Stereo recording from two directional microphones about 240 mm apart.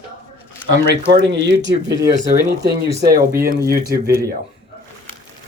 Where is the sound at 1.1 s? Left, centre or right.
Right.